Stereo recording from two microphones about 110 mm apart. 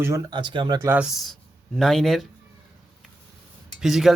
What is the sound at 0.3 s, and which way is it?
Speech, 45° right (ahead or behind).